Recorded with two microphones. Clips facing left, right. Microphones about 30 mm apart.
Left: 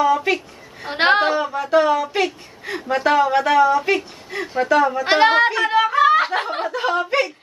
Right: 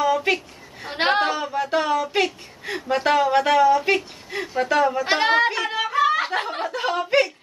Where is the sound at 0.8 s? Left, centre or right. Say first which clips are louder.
Left 4 dB; centre.